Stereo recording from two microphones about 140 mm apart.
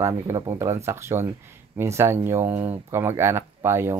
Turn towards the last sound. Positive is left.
turn(degrees=-20)  # may be behind; listen again after turning